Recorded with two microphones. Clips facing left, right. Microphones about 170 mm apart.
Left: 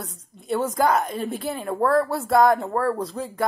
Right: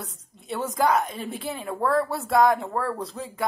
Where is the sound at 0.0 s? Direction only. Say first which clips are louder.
Left 3 dB; centre (ahead or behind).